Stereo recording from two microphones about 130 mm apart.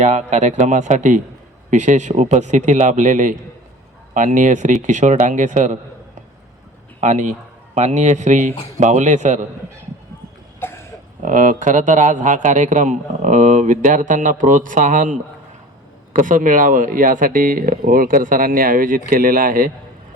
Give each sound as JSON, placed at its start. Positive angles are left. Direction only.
{"t": 0.0, "sound": "a man's voice", "side_deg": -65}
{"t": 7.0, "sound": "a man's voice", "side_deg": -70}
{"t": 10.6, "sound": "throat clearing", "side_deg": 20}
{"t": 11.2, "sound": "a man's voice", "side_deg": -80}
{"t": 16.1, "sound": "speech", "side_deg": -90}